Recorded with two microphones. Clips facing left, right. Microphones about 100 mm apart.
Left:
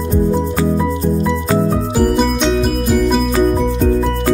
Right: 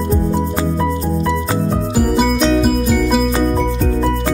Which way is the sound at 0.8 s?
Centre (ahead or behind).